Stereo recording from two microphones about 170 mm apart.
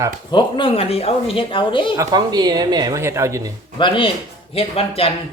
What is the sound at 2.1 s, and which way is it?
Speech, 25° right (ahead or behind).